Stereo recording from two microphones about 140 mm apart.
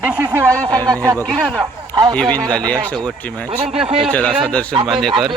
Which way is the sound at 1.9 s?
30° right (ahead or behind).